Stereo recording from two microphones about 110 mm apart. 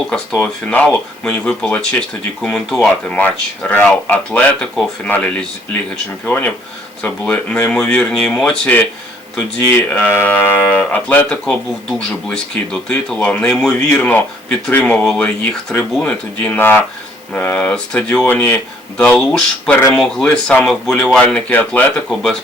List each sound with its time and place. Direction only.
0.1 s speech: 10° left (ahead or behind)